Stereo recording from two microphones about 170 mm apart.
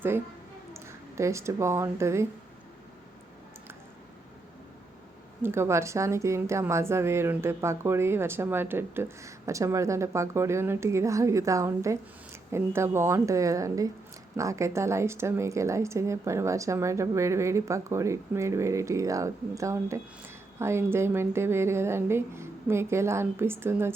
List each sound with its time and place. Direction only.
0.7 s speech: 15° right (ahead or behind)
5.4 s a woman's voice: 15° right (ahead or behind)